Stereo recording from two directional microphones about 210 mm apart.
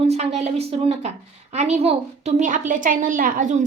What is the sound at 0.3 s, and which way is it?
A woman's voice, 30° right (ahead or behind).